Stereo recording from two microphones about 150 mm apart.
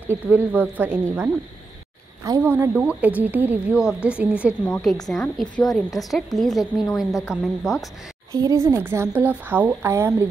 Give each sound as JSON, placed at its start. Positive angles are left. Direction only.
{"t": 0.1, "sound": "speech", "side_deg": -10}
{"t": 2.2, "sound": "speech", "side_deg": -25}
{"t": 2.5, "sound": "speech", "side_deg": -10}
{"t": 4.6, "sound": "a woman's voice", "side_deg": 5}
{"t": 8.3, "sound": "speech", "side_deg": -25}